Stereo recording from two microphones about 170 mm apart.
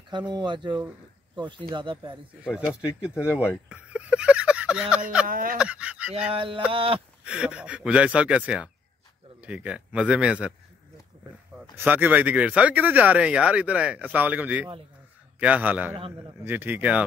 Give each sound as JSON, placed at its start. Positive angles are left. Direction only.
{"t": 0.1, "sound": "speech", "side_deg": -25}
{"t": 3.6, "sound": "a sound", "side_deg": -5}
{"t": 5.3, "sound": "speech", "side_deg": -55}
{"t": 5.6, "sound": "speech", "side_deg": -5}
{"t": 6.3, "sound": "a sound", "side_deg": -30}
{"t": 7.2, "sound": "speech", "side_deg": -5}
{"t": 11.7, "sound": "speech", "side_deg": -10}